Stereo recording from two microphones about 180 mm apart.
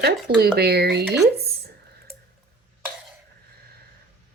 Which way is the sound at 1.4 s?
60° right (ahead or behind).